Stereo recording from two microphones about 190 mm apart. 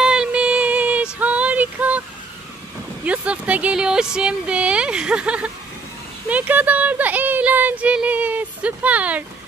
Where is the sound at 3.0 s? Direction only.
5° right (ahead or behind).